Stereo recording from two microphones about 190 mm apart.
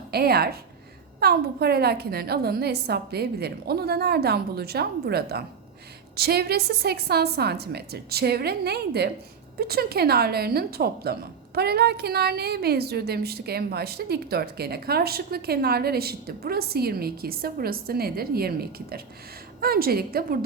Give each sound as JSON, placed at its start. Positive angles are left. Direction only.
{"t": 0.1, "sound": "a woman's voice", "side_deg": -55}